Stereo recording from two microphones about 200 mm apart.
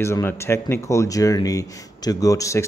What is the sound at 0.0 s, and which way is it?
Speech, 10° left (ahead or behind).